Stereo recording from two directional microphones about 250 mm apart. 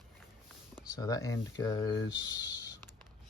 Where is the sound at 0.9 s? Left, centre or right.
Centre.